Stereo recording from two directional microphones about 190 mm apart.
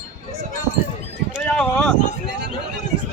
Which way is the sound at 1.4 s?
10° left (ahead or behind).